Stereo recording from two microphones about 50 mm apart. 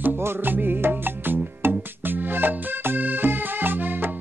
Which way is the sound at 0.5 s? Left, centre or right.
Right.